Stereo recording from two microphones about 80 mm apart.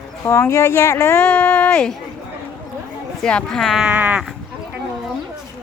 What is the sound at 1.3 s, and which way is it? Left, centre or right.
Speech, left.